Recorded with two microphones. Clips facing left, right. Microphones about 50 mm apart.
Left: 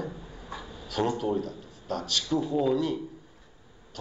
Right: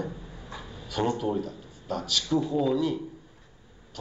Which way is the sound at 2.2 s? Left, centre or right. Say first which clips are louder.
Right 2 dB; right.